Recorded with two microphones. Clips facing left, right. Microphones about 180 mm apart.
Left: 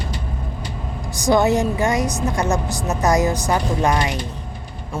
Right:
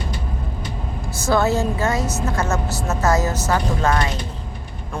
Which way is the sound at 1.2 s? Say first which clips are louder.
Left 2 dB; 15° left (ahead or behind).